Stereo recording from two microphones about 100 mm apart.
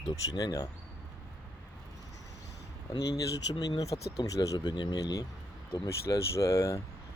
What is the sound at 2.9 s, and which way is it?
Speech, 40° left (ahead or behind).